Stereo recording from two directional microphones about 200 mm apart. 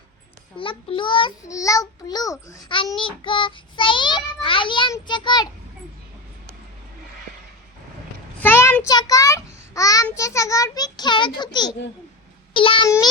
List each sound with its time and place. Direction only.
0.5 s child singing: 25° left (ahead or behind)
8.4 s a child's voice: 10° left (ahead or behind)